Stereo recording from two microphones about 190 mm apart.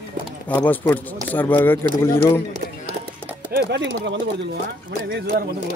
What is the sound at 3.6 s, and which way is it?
Speech, 70° right (ahead or behind).